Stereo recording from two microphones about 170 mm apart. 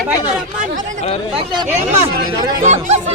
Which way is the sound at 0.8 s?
50° right (ahead or behind).